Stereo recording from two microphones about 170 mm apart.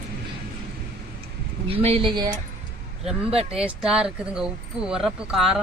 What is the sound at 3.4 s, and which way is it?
Speech, 5° right (ahead or behind).